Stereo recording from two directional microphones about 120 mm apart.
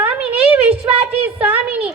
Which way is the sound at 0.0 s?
15° right (ahead or behind).